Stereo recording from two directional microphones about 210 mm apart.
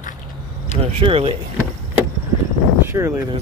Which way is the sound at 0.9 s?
25° right (ahead or behind).